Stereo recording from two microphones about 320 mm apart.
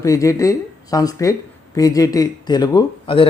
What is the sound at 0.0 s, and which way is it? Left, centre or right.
Speech, centre.